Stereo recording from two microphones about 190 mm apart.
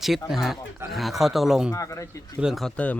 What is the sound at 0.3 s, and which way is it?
Speech, centre (ahead or behind).